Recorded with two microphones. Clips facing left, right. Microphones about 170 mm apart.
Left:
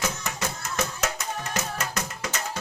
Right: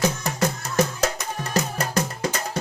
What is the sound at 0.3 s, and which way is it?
Music, 35° right (ahead or behind).